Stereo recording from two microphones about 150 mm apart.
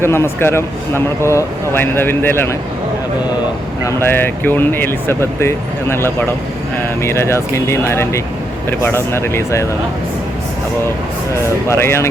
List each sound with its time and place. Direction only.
0.0 s a man's voice: 15° left (ahead or behind)
3.8 s a man's voice: 15° left (ahead or behind)
11.7 s a man's voice: 15° left (ahead or behind)